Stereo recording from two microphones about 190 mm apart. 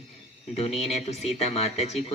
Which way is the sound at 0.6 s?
35° left (ahead or behind).